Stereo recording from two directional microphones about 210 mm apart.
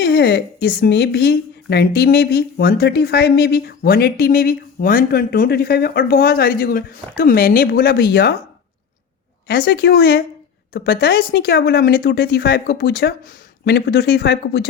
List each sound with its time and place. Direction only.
0.0 s a woman's voice: 50° left (ahead or behind)
9.5 s a woman's voice: 50° left (ahead or behind)